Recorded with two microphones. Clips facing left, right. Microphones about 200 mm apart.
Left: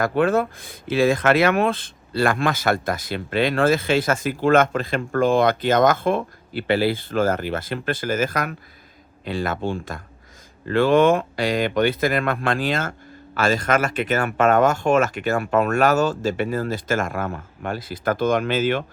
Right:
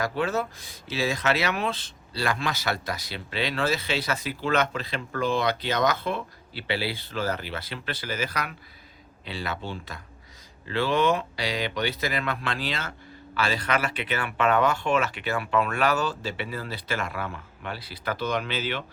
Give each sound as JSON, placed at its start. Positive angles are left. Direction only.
{"t": 0.0, "sound": "speech", "side_deg": 55}